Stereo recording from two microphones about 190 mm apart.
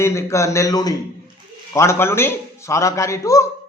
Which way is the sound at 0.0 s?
15° left (ahead or behind).